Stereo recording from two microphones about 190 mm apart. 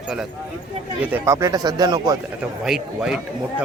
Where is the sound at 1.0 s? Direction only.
10° right (ahead or behind).